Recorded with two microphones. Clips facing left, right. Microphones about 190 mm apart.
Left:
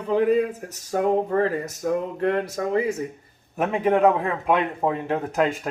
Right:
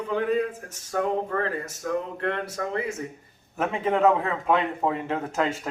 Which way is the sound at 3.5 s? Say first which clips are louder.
Left 4 dB; 15° left (ahead or behind).